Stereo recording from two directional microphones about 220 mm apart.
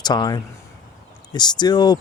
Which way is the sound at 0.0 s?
20° left (ahead or behind).